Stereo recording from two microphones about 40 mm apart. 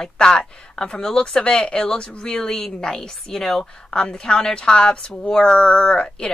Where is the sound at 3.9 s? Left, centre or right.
Left.